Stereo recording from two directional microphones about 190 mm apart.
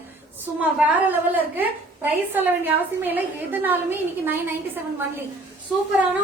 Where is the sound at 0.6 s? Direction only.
10° right (ahead or behind).